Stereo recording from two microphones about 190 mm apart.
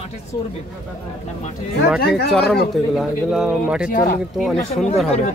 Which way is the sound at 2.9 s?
Centre (ahead or behind).